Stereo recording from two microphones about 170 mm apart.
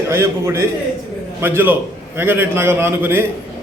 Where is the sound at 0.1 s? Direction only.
15° right (ahead or behind).